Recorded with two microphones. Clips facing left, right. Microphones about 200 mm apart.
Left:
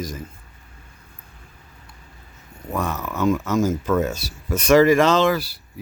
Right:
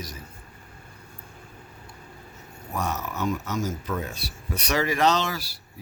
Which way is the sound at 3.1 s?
90° left.